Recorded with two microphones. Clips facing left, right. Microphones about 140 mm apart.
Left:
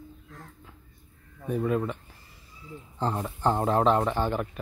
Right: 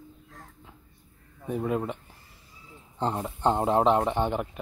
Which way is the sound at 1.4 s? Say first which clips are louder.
Left 1 dB; 20° right (ahead or behind).